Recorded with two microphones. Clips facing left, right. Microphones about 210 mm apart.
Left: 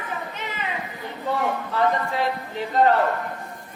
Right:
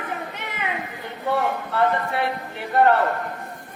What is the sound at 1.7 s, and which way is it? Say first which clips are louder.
A woman's voice: right 1 dB; 60° right (ahead or behind).